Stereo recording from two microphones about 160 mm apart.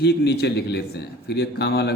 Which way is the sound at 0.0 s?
90° left.